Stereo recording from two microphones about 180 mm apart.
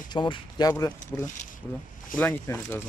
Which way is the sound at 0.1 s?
25° left (ahead or behind).